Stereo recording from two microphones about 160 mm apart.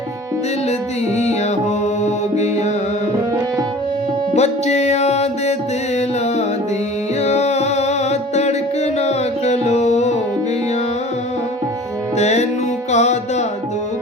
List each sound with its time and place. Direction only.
1.1 s music: 45° left (ahead or behind)
4.4 s music: 45° left (ahead or behind)
7.2 s music: 45° left (ahead or behind)
12.1 s music: 45° left (ahead or behind)